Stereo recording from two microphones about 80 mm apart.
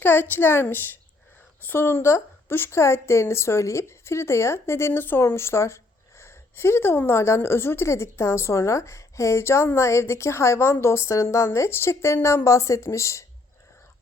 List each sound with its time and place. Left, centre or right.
0.0 s a woman's voice: left